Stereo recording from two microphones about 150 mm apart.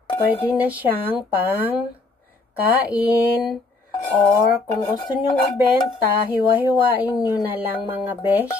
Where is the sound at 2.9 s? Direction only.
10° right (ahead or behind).